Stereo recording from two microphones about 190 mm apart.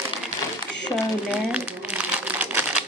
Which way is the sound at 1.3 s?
5° right (ahead or behind).